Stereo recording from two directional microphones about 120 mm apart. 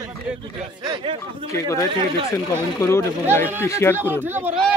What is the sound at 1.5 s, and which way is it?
Speech, 25° left (ahead or behind).